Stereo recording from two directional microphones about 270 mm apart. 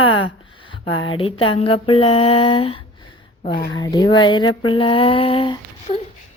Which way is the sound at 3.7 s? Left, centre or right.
Centre.